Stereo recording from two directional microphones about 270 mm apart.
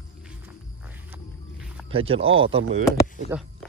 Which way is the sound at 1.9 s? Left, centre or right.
Right.